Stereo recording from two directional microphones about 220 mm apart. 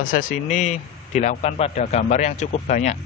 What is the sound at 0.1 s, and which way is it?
A man's voice, 35° left (ahead or behind).